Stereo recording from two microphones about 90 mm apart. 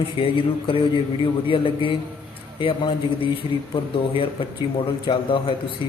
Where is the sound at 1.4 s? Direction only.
75° left (ahead or behind).